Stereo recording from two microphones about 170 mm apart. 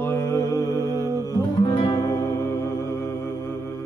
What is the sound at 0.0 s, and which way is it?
Mantra, 15° left (ahead or behind).